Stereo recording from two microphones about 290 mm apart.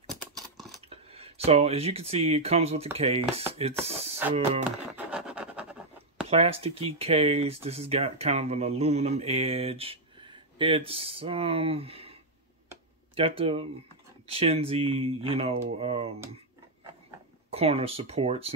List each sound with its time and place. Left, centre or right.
0.1 s a sound: centre
0.8 s speech: centre
4.6 s scratch: centre
6.2 s speech: right
17.5 s speech: centre